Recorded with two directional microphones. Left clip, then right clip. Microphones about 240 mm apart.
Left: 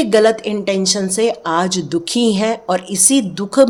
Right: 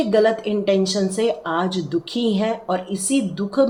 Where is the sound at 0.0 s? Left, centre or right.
Left.